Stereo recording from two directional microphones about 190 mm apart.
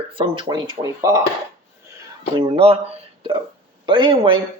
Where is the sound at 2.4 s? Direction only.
30° right (ahead or behind).